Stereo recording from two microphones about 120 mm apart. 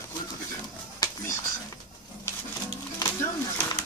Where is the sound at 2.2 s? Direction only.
20° left (ahead or behind).